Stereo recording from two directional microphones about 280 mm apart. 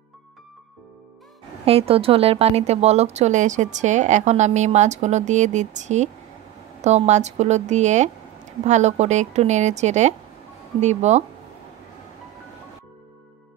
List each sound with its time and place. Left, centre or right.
1.7 s speech: centre